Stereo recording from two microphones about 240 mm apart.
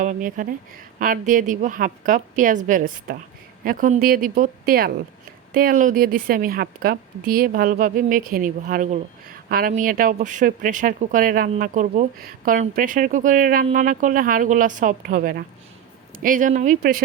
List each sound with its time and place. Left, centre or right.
0.0 s speech: right